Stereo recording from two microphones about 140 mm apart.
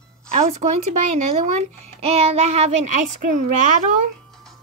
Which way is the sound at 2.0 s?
45° right (ahead or behind).